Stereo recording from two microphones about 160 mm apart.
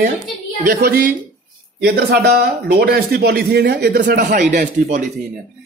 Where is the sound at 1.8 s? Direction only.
90° right.